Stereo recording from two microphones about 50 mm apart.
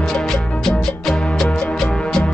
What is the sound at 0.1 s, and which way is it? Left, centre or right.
Music, centre.